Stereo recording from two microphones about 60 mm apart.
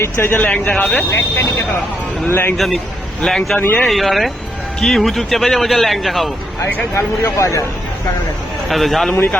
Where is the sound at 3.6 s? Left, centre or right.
Left.